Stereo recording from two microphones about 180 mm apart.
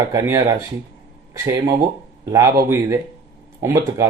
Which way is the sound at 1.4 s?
20° right (ahead or behind).